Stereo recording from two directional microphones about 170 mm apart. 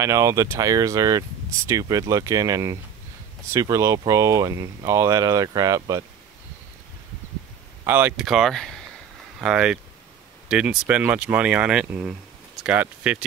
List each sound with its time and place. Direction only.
0.0 s speech: 15° right (ahead or behind)
7.8 s speech: 10° right (ahead or behind)